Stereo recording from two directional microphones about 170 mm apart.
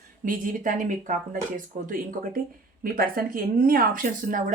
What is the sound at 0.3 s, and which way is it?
Speech, 50° right (ahead or behind).